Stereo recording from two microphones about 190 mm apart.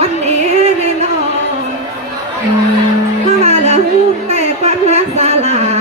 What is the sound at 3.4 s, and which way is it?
Music, 35° right (ahead or behind).